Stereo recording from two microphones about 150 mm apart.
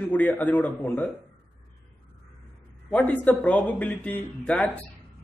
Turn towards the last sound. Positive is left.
turn(degrees=10)  # may be behind; listen again after turning